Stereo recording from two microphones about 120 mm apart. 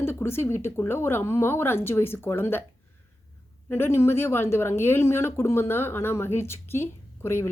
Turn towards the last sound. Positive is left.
turn(degrees=20)  # may be behind; listen again after turning